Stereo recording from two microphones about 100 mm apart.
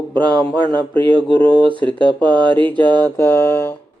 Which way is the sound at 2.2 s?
50° right (ahead or behind).